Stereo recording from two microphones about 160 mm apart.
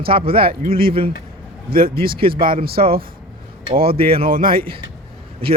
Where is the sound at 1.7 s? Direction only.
65° right (ahead or behind).